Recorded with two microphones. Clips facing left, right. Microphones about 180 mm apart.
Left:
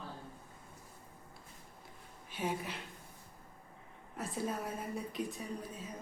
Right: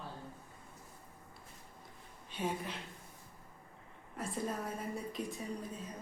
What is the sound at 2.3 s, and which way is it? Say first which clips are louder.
Speech: even; 5° left (ahead or behind).